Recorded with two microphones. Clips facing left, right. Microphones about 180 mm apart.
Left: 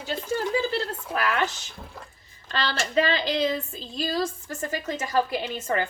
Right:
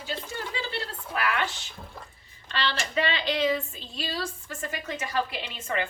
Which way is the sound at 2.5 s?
40° left (ahead or behind).